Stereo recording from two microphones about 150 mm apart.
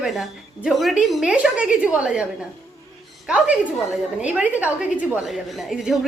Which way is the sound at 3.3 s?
10° right (ahead or behind).